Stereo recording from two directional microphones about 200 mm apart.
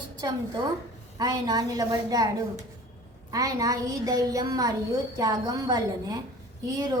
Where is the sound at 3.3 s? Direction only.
15° right (ahead or behind).